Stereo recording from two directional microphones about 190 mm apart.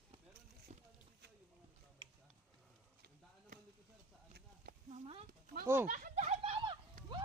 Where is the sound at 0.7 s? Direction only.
35° right (ahead or behind).